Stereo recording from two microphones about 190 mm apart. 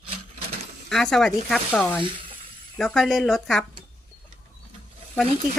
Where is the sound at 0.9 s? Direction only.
5° left (ahead or behind).